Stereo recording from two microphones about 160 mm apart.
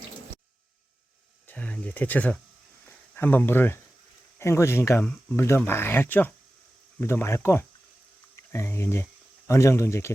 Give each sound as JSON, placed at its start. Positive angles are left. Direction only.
{"t": 1.5, "sound": "speech", "side_deg": 10}
{"t": 2.8, "sound": "a sound", "side_deg": 10}
{"t": 4.4, "sound": "speech", "side_deg": 15}
{"t": 5.0, "sound": "speech", "side_deg": 5}